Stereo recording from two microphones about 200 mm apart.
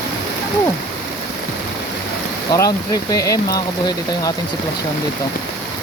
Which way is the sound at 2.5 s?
20° left (ahead or behind).